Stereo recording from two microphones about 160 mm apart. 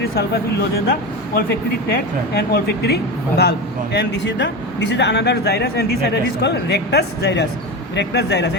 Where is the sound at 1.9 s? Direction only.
75° left (ahead or behind).